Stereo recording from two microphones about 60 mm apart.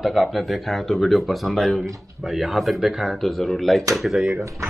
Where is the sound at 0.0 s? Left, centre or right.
Centre.